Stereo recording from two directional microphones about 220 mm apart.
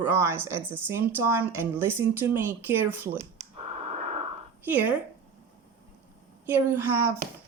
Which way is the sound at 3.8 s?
30° right (ahead or behind).